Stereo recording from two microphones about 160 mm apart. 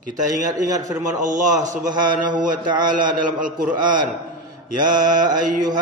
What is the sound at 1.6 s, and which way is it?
A man's voice, 55° right (ahead or behind).